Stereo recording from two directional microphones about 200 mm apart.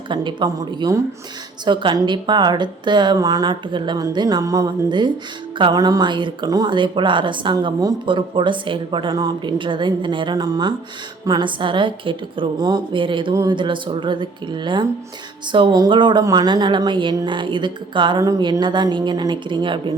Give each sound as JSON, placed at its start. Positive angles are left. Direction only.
{"t": 0.1, "sound": "speech", "side_deg": -25}